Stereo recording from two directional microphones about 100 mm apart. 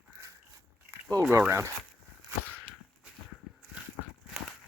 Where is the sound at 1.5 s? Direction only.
30° right (ahead or behind).